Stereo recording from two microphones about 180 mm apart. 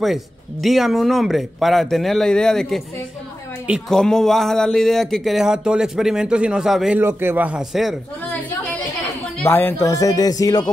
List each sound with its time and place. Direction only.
0.0 s a woman's voice: centre (ahead or behind); by 10.3 s 20° left (ahead or behind)